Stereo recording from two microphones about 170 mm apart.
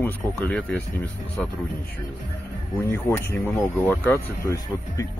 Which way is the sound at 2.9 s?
15° left (ahead or behind).